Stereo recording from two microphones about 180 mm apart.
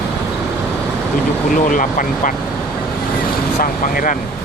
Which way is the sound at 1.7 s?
45° left (ahead or behind).